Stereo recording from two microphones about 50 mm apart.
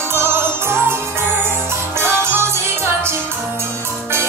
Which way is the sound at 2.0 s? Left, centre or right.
Right.